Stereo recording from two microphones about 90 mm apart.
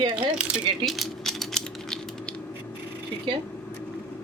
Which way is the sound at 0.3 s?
10° right (ahead or behind).